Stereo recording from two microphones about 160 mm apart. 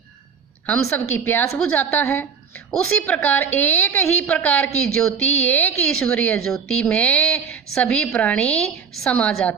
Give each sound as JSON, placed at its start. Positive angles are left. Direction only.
{"t": 0.7, "sound": "a woman's voice", "side_deg": 10}